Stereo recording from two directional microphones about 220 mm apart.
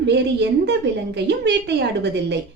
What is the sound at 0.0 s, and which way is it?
A woman's voice, 50° right (ahead or behind).